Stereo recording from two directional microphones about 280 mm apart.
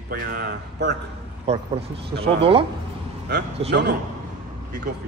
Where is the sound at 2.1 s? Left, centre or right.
Centre.